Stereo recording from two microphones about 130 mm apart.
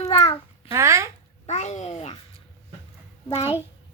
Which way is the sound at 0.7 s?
25° right (ahead or behind).